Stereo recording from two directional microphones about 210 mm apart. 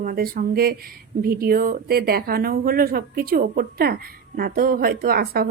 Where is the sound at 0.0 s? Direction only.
40° right (ahead or behind).